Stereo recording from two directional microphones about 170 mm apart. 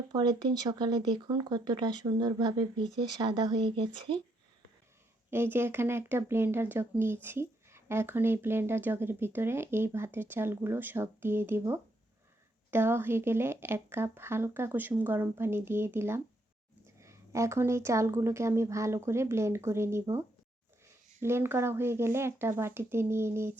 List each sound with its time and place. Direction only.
0.1 s speech: 25° right (ahead or behind)
5.3 s speech: 15° right (ahead or behind)